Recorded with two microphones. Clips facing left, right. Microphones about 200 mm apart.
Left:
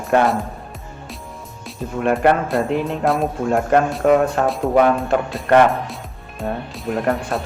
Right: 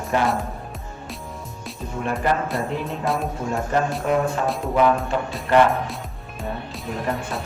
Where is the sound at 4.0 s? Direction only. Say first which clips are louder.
Left 6 dB; 65° left (ahead or behind).